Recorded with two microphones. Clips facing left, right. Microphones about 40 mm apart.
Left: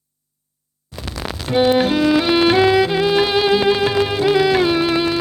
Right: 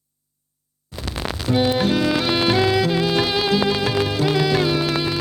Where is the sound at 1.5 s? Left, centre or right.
Left.